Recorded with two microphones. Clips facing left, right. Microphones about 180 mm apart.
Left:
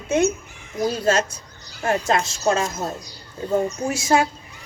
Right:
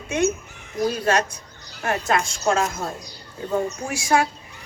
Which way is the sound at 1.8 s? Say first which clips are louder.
Left 2 dB; 25° left (ahead or behind).